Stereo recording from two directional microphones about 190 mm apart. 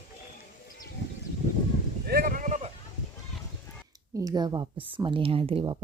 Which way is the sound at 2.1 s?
50° right (ahead or behind).